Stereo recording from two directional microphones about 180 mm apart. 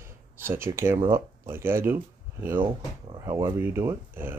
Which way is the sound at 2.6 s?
25° right (ahead or behind).